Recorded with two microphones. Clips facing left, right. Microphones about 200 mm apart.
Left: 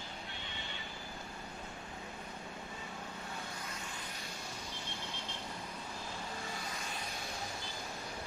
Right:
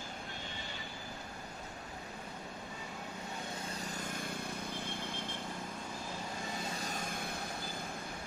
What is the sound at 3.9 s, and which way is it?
Vehicle, 50° right (ahead or behind).